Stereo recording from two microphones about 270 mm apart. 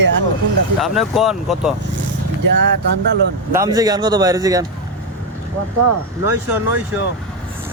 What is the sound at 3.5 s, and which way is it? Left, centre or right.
Speech, centre.